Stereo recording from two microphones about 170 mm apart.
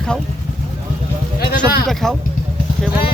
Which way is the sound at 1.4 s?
65° left (ahead or behind).